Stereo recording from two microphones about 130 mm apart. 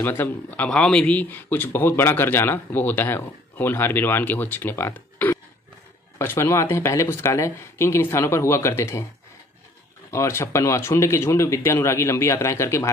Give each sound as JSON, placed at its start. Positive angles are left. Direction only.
{"t": 0.0, "sound": "speech", "side_deg": 15}
{"t": 10.1, "sound": "speech", "side_deg": 20}